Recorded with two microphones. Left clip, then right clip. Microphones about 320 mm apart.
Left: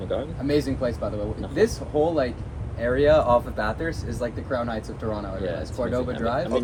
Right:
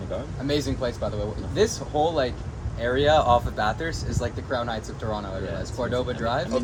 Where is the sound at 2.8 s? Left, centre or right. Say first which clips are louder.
Left 1 dB; centre.